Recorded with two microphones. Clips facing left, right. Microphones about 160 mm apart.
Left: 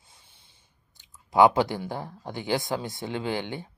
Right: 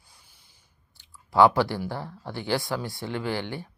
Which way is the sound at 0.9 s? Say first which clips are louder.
Even; 20° left (ahead or behind).